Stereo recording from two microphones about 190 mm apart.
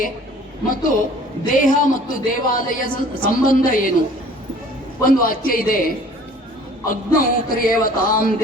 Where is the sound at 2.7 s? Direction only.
45° left (ahead or behind).